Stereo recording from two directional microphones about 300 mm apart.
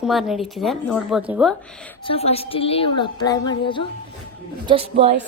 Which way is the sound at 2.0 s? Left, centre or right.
Centre.